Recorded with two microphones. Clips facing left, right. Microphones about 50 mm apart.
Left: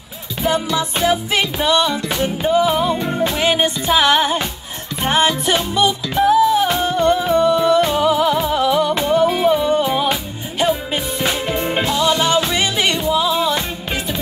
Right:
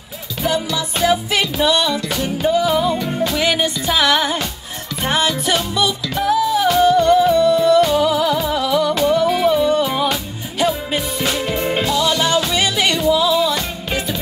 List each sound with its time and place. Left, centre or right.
0.4 s music: left